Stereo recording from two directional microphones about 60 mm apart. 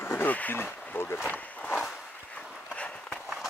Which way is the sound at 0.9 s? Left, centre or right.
Left.